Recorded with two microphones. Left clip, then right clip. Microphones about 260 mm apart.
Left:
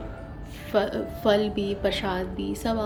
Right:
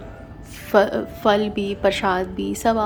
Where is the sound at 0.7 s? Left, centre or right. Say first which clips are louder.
Right 8 dB; centre.